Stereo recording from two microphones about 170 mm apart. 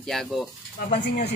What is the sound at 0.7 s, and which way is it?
Speech, 50° left (ahead or behind).